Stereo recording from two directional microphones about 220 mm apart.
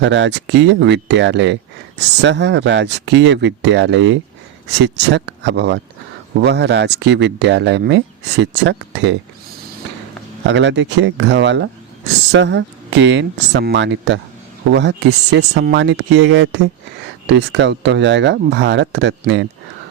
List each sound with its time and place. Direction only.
0.0 s speech: 55° right (ahead or behind)
10.4 s speech: 55° right (ahead or behind)